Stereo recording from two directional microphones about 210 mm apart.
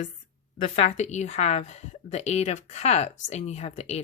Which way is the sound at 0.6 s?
35° left (ahead or behind).